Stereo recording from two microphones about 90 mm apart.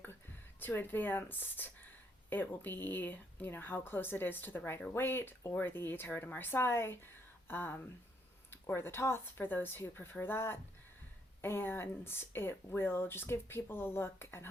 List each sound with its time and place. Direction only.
0.6 s speech: 20° left (ahead or behind)